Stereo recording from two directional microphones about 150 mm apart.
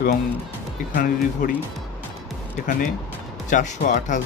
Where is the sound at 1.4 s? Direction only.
65° left (ahead or behind).